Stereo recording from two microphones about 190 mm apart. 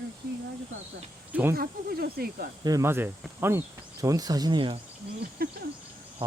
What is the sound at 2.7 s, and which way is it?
Speech, 15° right (ahead or behind).